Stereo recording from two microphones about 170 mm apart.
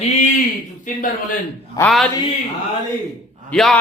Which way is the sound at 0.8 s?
50° left (ahead or behind).